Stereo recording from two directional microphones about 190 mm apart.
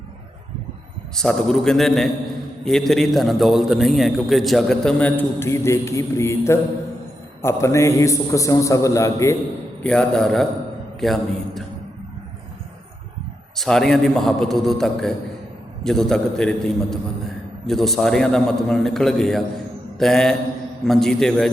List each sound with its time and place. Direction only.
1.1 s a man's voice: 5° left (ahead or behind)
9.8 s a man's voice: 5° left (ahead or behind)
13.6 s a man's voice: centre (ahead or behind)